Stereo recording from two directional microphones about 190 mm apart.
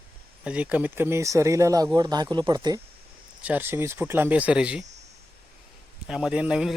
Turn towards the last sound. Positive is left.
turn(degrees=-5)  # may be behind; listen again after turning